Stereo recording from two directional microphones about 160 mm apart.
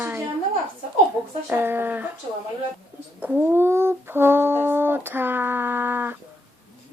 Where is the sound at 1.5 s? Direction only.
15° right (ahead or behind).